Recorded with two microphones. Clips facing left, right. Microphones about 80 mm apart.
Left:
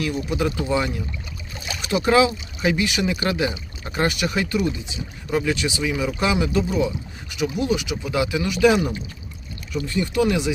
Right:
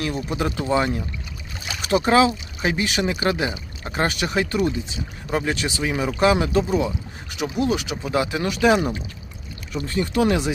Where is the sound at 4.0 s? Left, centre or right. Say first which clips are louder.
Even; right.